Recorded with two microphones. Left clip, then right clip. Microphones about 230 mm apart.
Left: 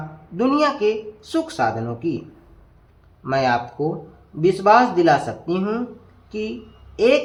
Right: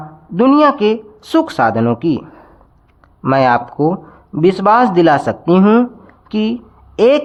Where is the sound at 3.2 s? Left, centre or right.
Right.